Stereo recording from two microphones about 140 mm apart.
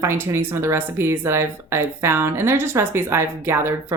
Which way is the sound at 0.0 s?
20° right (ahead or behind).